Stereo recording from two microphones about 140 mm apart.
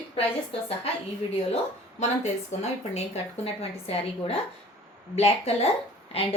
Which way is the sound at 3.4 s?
45° left (ahead or behind).